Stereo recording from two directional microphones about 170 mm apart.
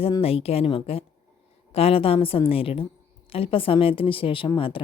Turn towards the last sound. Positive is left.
turn(degrees=30)  # may be behind; listen again after turning